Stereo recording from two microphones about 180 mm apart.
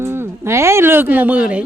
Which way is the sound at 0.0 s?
15° right (ahead or behind).